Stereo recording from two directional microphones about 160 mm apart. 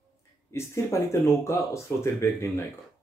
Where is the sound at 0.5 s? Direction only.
15° left (ahead or behind).